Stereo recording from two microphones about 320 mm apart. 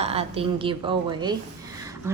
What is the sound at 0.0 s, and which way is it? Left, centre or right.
A woman's voice, centre.